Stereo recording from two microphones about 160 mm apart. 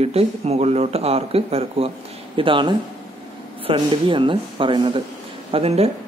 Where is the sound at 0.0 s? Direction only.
40° right (ahead or behind).